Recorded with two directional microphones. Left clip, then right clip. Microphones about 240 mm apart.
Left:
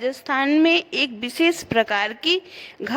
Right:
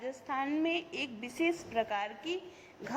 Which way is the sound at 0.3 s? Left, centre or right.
Left.